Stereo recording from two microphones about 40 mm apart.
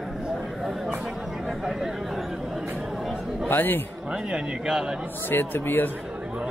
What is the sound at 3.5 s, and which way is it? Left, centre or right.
Speech, left.